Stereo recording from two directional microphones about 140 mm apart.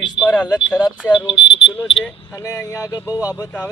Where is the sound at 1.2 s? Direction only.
40° left (ahead or behind).